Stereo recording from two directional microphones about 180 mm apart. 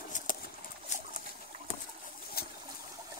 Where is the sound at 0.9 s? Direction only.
40° left (ahead or behind).